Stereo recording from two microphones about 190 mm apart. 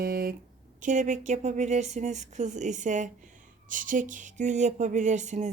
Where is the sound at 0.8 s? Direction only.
40° right (ahead or behind).